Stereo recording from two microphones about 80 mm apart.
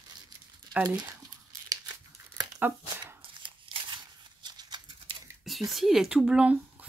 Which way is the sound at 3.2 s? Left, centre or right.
Right.